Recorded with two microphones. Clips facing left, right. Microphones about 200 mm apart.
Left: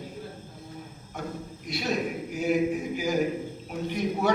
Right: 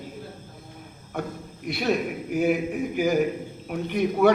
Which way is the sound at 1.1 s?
60° right (ahead or behind).